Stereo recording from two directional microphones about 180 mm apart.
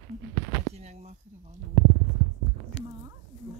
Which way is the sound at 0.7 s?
35° right (ahead or behind).